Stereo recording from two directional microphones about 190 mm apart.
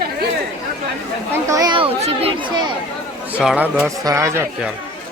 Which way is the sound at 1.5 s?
20° right (ahead or behind).